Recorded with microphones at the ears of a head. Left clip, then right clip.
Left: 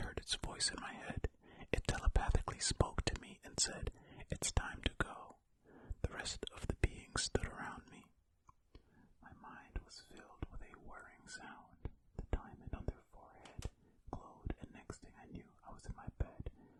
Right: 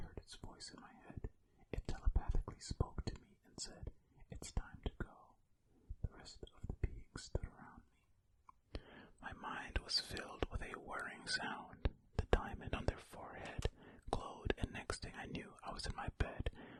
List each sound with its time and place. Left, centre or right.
0.0 s whispering: left
8.7 s whispering: right